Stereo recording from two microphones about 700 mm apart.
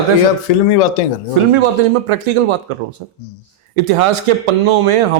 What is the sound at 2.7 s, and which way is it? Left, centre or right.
Speech, right.